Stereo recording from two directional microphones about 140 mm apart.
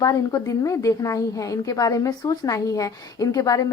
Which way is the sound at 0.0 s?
25° left (ahead or behind).